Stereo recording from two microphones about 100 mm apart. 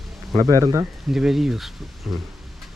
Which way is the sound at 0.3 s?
35° right (ahead or behind).